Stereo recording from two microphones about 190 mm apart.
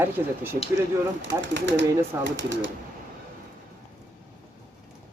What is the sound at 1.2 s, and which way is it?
Speech, 70° right (ahead or behind).